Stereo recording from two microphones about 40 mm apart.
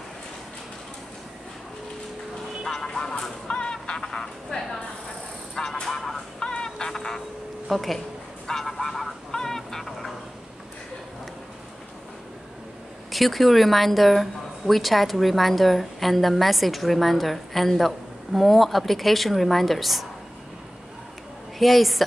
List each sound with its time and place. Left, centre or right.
2.6 s music: centre
3.5 s a sound: left
5.8 s vehicle: centre
6.5 s goose: centre
6.9 s honk: centre
7.7 s speech: centre
8.5 s vehicle: centre
9.3 s fowl: centre
9.8 s vehicle: centre
13.1 s speech: centre
21.5 s speech: centre